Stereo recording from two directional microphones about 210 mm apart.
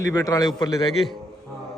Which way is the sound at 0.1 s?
15° left (ahead or behind).